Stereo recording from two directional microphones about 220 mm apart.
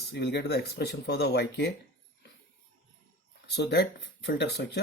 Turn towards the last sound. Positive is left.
turn(degrees=50)  # may be behind; listen again after turning